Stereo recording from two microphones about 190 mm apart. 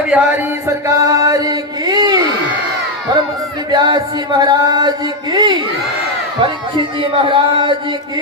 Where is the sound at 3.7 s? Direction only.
20° right (ahead or behind).